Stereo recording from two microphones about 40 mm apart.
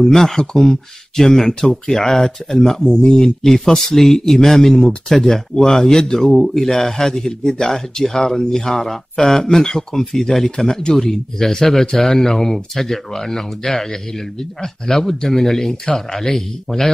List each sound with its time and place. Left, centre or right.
0.0 s speech: centre